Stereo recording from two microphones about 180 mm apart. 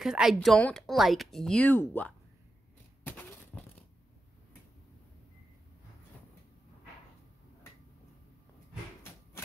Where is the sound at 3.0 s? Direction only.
10° left (ahead or behind).